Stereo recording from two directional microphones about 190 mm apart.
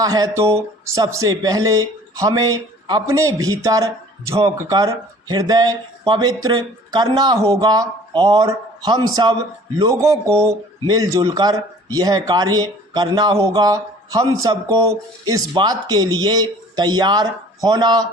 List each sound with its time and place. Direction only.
0.0 s speech: 20° right (ahead or behind)